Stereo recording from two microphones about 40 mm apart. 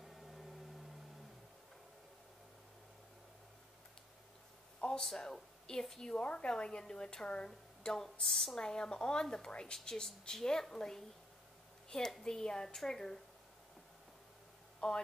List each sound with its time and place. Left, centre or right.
0.0 s a sound: centre
4.7 s a sound: left
5.2 s a woman's voice: centre
8.5 s a woman's voice: centre
12.2 s a woman's voice: centre
14.8 s speech: left